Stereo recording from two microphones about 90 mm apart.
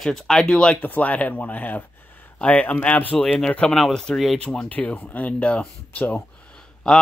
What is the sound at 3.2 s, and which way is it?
Speech, 5° left (ahead or behind).